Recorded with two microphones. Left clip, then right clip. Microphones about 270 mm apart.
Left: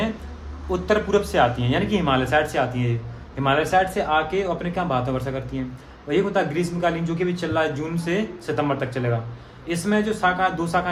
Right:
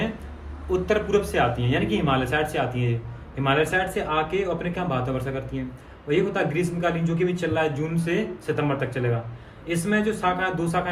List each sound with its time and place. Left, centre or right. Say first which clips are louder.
0.7 s speech: left 2 dB; centre